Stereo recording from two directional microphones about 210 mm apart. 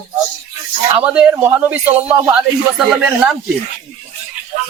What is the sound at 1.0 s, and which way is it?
A man's voice, 5° right (ahead or behind).